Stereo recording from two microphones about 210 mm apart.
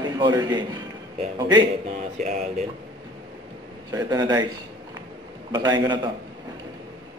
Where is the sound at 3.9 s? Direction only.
20° right (ahead or behind).